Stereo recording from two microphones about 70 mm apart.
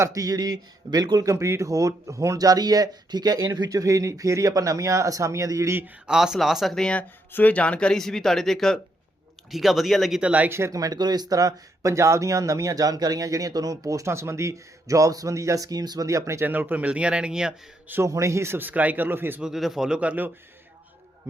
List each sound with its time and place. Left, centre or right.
0.1 s speech: right
1.3 s speech: right
6.1 s speech: centre
6.7 s speech: centre
10.2 s speech: centre
10.5 s speech: right
10.8 s speech: right
14.1 s speech: right
16.0 s speech: right
16.5 s speech: right; by 17.5 s centre
18.0 s speech: right
18.7 s speech: right
19.4 s speech: centre
20.0 s speech: right